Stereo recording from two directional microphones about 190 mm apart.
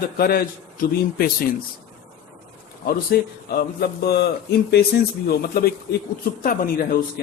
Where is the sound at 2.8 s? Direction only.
55° left (ahead or behind).